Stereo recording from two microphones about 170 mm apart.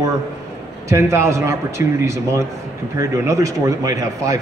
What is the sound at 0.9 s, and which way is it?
A man's voice, 15° right (ahead or behind).